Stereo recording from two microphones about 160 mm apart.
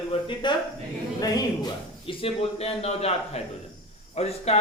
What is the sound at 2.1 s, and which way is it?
Speech, 35° left (ahead or behind).